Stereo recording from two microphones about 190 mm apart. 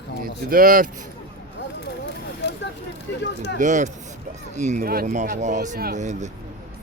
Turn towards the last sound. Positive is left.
turn(degrees=-40)  # may be behind; listen again after turning